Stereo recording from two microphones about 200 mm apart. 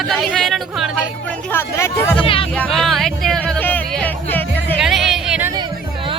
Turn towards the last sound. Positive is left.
turn(degrees=-5)  # may be behind; listen again after turning